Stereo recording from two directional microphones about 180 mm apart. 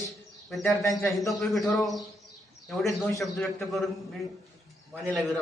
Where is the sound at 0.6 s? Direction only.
15° left (ahead or behind).